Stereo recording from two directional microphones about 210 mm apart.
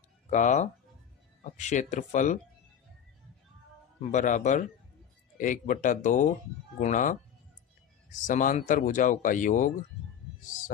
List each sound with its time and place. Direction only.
0.3 s speech: 35° left (ahead or behind)
4.1 s speech: 35° left (ahead or behind)
8.3 s speech: 40° left (ahead or behind)